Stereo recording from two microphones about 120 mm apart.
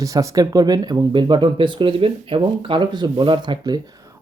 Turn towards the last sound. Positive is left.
turn(degrees=-35)  # may be behind; listen again after turning